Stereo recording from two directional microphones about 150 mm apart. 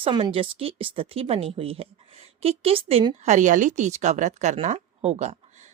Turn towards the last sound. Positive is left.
turn(degrees=-45)  # may be behind; listen again after turning